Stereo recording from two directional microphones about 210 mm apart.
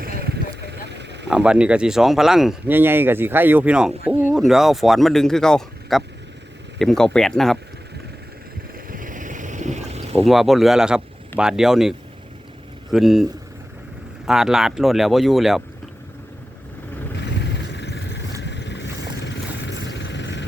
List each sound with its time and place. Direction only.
0.0 s a sound: 45° right (ahead or behind)
1.3 s speech: 5° right (ahead or behind)
8.9 s boat: 40° right (ahead or behind)
10.2 s speech: centre (ahead or behind)
14.3 s speech: centre (ahead or behind)
17.2 s vehicle: 55° left (ahead or behind)